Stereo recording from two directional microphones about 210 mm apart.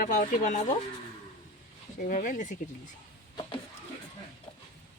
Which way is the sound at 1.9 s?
40° left (ahead or behind).